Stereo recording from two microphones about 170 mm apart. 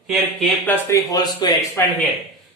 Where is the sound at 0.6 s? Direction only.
15° left (ahead or behind).